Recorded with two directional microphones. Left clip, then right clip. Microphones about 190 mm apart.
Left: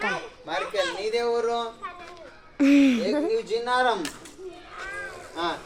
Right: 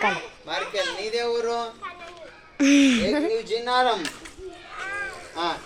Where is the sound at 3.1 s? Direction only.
30° right (ahead or behind).